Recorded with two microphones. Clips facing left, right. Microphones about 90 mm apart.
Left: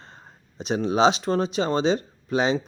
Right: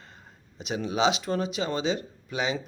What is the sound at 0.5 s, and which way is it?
Speech, 35° left (ahead or behind).